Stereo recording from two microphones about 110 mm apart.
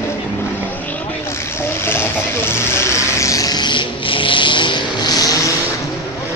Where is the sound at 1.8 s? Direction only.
20° left (ahead or behind); by 5.3 s 35° left (ahead or behind).